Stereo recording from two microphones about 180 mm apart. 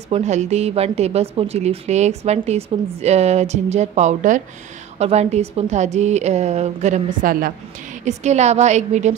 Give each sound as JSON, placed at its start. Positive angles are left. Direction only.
{"t": 0.1, "sound": "a woman's voice", "side_deg": -40}
{"t": 8.0, "sound": "a woman's voice", "side_deg": -40}